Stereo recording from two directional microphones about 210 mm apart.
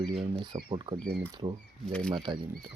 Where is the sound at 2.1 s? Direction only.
25° right (ahead or behind).